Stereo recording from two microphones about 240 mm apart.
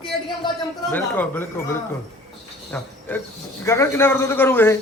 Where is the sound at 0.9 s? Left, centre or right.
Centre.